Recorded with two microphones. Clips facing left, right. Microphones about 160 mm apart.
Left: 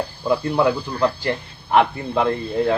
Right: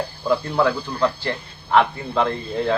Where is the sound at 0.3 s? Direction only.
15° left (ahead or behind).